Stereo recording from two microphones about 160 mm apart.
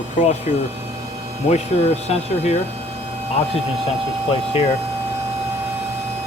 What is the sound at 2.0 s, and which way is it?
Speech, 45° left (ahead or behind).